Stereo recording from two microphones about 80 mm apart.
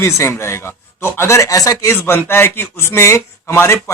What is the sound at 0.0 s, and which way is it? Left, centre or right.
A man's voice, left.